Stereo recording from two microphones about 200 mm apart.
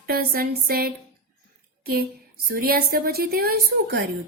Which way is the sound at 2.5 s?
50° right (ahead or behind).